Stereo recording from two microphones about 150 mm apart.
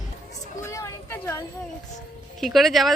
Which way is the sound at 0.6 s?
20° left (ahead or behind).